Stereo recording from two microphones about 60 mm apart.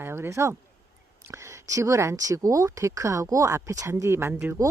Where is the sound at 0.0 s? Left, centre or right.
Right.